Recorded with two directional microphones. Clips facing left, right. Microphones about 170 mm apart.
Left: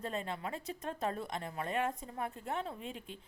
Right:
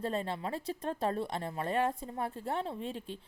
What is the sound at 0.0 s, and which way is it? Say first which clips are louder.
Speech: right 4 dB; 35° right (ahead or behind).